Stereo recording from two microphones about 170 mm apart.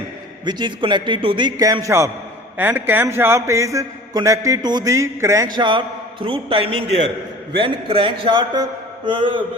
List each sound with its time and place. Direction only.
0.4 s a man's voice: 25° right (ahead or behind)